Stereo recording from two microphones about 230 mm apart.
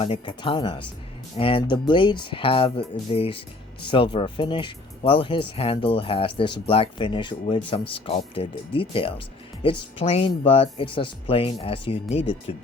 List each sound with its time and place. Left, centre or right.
0.0 s speech: left